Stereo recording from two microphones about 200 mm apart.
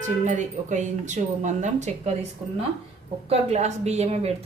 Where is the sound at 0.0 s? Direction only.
35° right (ahead or behind).